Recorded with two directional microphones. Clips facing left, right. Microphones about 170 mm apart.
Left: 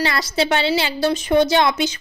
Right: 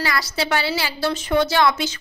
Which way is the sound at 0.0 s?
25° left (ahead or behind).